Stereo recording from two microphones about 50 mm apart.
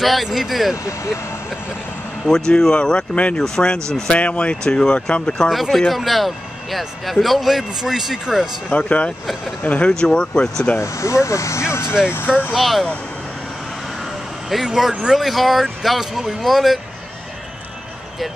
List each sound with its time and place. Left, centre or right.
0.0 s a man's voice: centre
0.8 s speech: left
2.2 s speech: centre
4.1 s speech: left
5.5 s a man's voice: centre
8.6 s speech: left
9.8 s speech: centre
10.8 s speech: left
12.5 s a man's voice: centre
14.5 s a man's voice: centre